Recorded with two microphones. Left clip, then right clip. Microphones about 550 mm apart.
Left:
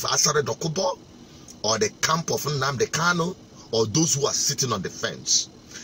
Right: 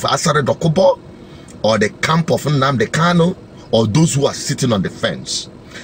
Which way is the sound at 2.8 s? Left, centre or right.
Left.